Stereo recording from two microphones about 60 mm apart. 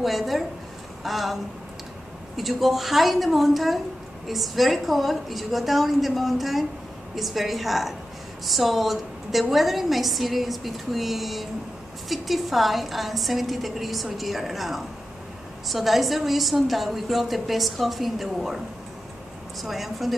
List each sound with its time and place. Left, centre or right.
0.0 s a woman's voice: centre
19.6 s a woman's voice: centre